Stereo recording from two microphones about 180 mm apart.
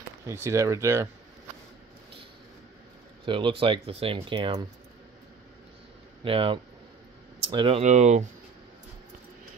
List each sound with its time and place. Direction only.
0.3 s speech: 15° right (ahead or behind)
3.3 s speech: 25° right (ahead or behind)
6.2 s speech: 30° right (ahead or behind)